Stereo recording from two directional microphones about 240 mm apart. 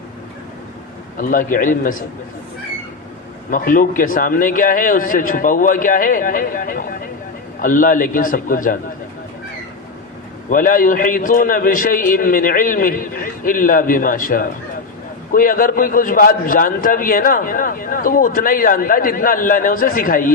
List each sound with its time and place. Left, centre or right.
1.2 s a man's voice: left
3.5 s a man's voice: left
10.5 s a man's voice: left